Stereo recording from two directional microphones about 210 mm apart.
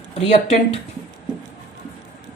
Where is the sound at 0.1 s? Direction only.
30° left (ahead or behind).